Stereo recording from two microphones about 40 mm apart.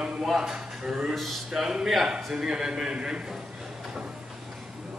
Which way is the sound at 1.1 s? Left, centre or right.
Centre.